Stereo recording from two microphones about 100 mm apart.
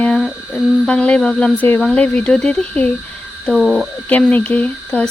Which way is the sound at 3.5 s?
5° right (ahead or behind).